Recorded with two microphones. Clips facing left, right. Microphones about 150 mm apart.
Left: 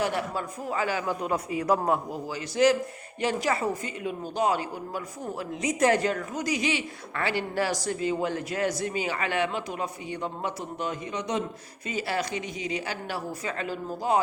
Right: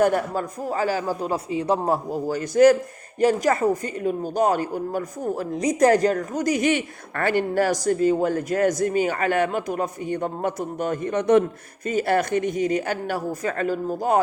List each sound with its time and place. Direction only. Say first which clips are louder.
0.0 s a man's voice: right 8 dB; 45° right (ahead or behind)